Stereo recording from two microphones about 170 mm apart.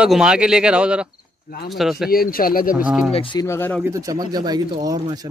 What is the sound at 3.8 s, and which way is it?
Speech, 20° right (ahead or behind).